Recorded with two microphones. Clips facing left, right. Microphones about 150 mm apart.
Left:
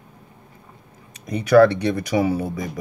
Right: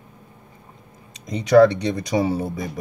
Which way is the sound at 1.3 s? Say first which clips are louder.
Even; 20° right (ahead or behind).